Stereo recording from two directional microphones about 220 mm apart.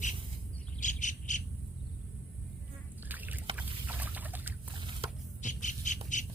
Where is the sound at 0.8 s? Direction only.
35° left (ahead or behind).